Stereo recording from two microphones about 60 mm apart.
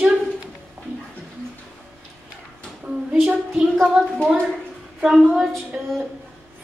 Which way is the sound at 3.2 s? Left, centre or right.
Centre.